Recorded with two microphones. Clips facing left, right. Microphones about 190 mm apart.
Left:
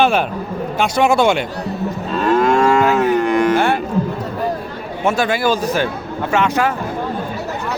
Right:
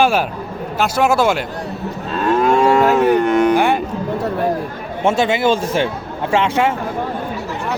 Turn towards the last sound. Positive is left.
turn(degrees=-25)  # may be behind; listen again after turning